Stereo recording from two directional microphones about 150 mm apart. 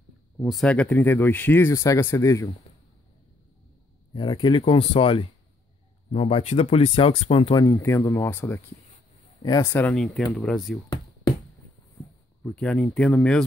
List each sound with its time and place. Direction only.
0.4 s speech: centre (ahead or behind); by 2.5 s 20° left (ahead or behind)
4.1 s speech: 30° left (ahead or behind)
7.6 s speech: 20° left (ahead or behind); by 10.8 s centre (ahead or behind)
12.4 s speech: 5° left (ahead or behind)